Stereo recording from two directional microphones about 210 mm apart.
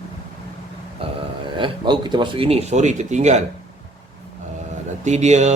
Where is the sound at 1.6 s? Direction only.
20° right (ahead or behind).